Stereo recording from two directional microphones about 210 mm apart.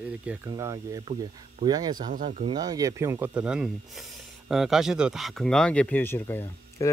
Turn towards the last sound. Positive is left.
turn(degrees=10)  # may be behind; listen again after turning